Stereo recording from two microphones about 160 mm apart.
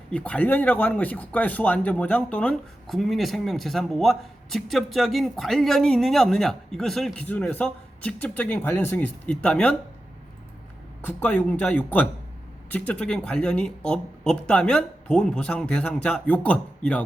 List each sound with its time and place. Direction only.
0.1 s speech: 10° left (ahead or behind)
11.0 s speech: 10° left (ahead or behind)